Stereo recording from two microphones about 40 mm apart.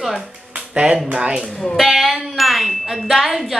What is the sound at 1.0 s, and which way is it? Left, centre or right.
Speech, right.